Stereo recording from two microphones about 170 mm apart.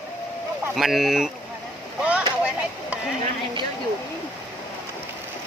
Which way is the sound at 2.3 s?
5° right (ahead or behind).